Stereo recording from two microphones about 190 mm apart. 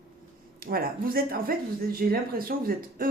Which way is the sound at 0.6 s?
50° right (ahead or behind).